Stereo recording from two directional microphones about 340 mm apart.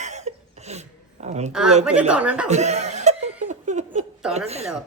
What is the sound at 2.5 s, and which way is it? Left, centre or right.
Chuckle, centre.